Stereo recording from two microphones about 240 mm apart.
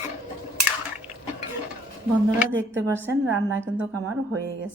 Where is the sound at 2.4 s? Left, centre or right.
Centre.